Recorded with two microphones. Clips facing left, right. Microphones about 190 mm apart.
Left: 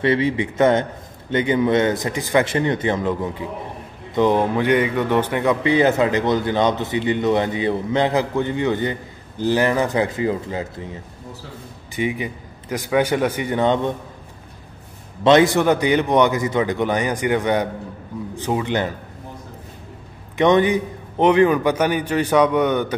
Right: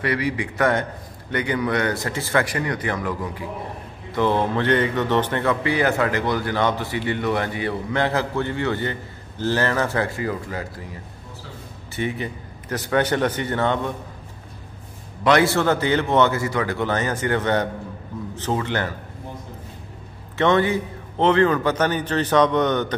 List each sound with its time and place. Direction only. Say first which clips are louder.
0.0 s a man's voice: left 5 dB; 25° left (ahead or behind)
15.2 s a man's voice: left 4 dB; 20° left (ahead or behind)
20.3 s a man's voice: left 3 dB; 15° left (ahead or behind)